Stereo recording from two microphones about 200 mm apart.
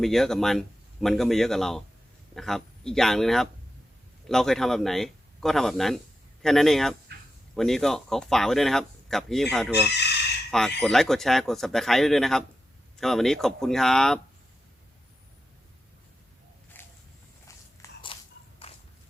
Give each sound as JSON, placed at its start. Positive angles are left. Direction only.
{"t": 0.0, "sound": "speech", "side_deg": 0}
{"t": 9.7, "sound": "speech", "side_deg": 55}
{"t": 10.8, "sound": "speech", "side_deg": 0}
{"t": 16.7, "sound": "a sound", "side_deg": 10}
{"t": 17.8, "sound": "biting", "side_deg": 15}